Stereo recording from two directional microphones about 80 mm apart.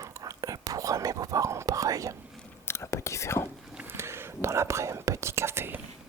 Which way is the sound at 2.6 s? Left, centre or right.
Left.